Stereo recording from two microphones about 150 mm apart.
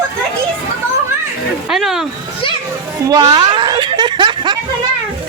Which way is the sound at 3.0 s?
25° right (ahead or behind).